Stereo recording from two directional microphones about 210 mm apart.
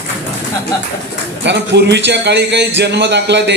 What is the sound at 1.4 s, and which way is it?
Speech, 55° right (ahead or behind).